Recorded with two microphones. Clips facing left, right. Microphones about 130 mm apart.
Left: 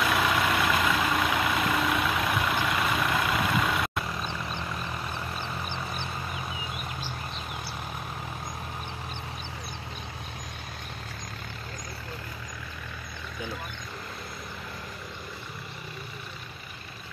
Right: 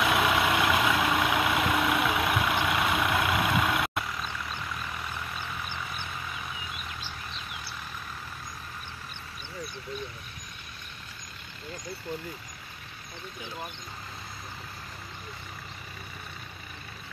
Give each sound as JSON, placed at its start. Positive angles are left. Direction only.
{"t": 0.0, "sound": "vehicle", "side_deg": -5}
{"t": 4.2, "sound": "vehicle", "side_deg": 25}